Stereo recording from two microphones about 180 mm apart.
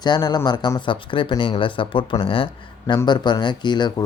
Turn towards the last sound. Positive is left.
turn(degrees=25)  # may be behind; listen again after turning